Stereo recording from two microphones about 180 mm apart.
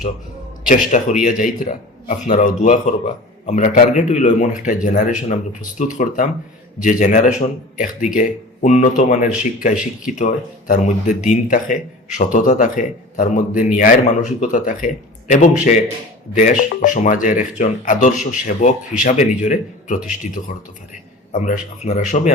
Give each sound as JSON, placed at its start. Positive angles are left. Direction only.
{"t": 0.7, "sound": "speech", "side_deg": 45}
{"t": 21.3, "sound": "speech", "side_deg": 45}